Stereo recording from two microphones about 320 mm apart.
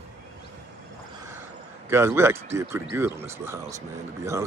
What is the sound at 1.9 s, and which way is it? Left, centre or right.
Speech, centre.